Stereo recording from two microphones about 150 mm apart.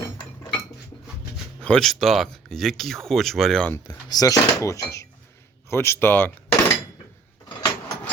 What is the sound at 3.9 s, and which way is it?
Speech, 25° left (ahead or behind).